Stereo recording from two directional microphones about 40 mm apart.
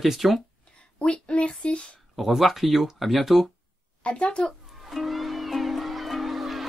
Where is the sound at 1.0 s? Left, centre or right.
Left.